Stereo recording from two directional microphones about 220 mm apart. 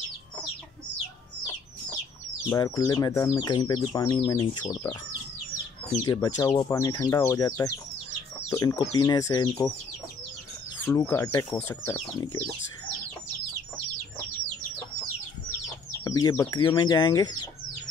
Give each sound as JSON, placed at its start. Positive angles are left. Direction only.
{"t": 2.5, "sound": "speech", "side_deg": 15}
{"t": 10.9, "sound": "speech", "side_deg": 15}
{"t": 16.0, "sound": "speech", "side_deg": 15}